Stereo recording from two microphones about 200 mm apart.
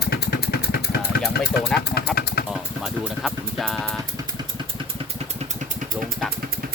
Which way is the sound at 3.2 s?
Centre (ahead or behind).